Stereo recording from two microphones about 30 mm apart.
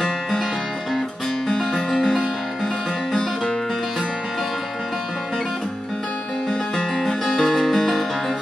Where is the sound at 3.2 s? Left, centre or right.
Left.